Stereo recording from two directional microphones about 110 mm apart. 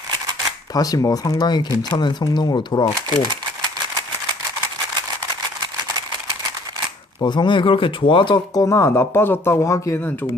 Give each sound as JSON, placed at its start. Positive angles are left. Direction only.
{"t": 0.7, "sound": "speech", "side_deg": 35}
{"t": 7.2, "sound": "speech", "side_deg": 45}
{"t": 8.6, "sound": "speech", "side_deg": 30}